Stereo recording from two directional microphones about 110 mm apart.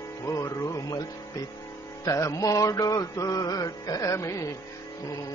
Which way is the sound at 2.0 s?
30° left (ahead or behind).